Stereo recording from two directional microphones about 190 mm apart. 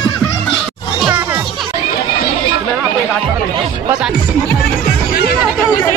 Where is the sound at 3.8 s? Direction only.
5° right (ahead or behind).